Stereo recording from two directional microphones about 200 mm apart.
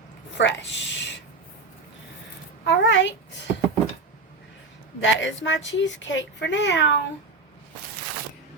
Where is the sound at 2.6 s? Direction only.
65° left (ahead or behind).